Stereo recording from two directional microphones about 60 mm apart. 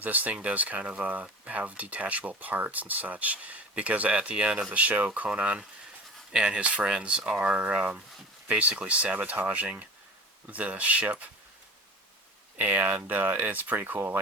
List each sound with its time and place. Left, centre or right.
0.0 s speech: right
12.5 s speech: right